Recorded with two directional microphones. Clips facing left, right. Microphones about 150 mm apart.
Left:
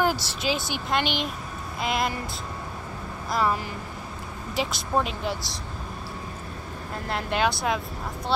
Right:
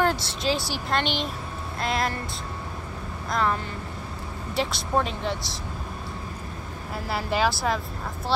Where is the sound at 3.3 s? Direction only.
5° left (ahead or behind).